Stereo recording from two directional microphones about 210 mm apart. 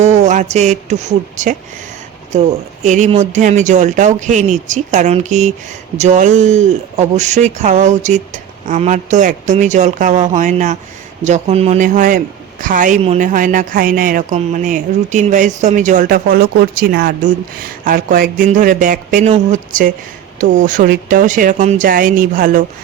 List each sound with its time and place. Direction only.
0.0 s speech: 35° right (ahead or behind)